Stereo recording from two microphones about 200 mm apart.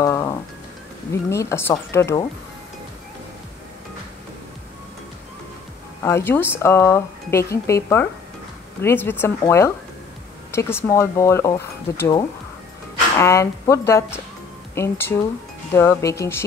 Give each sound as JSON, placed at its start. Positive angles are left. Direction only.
{"t": 0.0, "sound": "music", "side_deg": 15}
{"t": 1.3, "sound": "speech", "side_deg": 15}
{"t": 6.0, "sound": "speech", "side_deg": 10}